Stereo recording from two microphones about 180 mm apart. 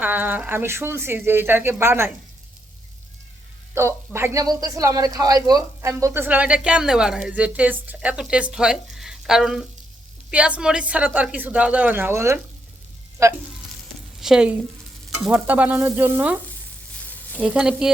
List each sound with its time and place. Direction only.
0.0 s speech: 10° right (ahead or behind)
3.8 s speech: 15° right (ahead or behind)
14.2 s speech: 5° right (ahead or behind)